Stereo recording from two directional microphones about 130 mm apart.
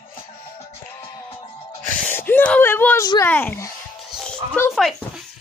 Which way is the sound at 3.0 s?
25° left (ahead or behind).